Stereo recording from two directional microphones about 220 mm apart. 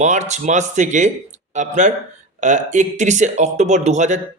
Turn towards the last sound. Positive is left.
turn(degrees=-30)  # may be behind; listen again after turning